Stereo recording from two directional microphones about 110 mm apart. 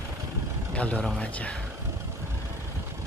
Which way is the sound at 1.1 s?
10° left (ahead or behind).